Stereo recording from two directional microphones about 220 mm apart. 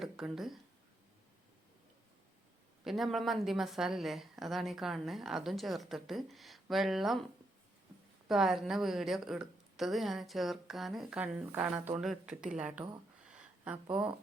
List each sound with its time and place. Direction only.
0.0 s speech: centre (ahead or behind)
2.8 s a woman's voice: centre (ahead or behind)
8.3 s a woman's voice: centre (ahead or behind)
13.2 s a sound: 5° right (ahead or behind)